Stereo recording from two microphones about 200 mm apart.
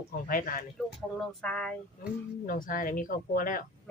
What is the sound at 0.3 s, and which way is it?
Speech, 45° left (ahead or behind).